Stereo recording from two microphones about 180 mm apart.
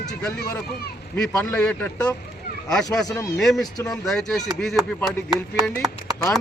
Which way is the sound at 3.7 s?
20° left (ahead or behind).